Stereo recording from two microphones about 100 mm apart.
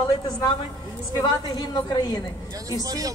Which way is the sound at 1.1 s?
40° left (ahead or behind).